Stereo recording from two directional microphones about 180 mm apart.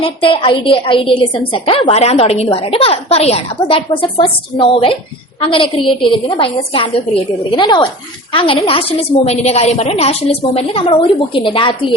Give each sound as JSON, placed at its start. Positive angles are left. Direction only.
{"t": 0.0, "sound": "a woman's voice", "side_deg": 30}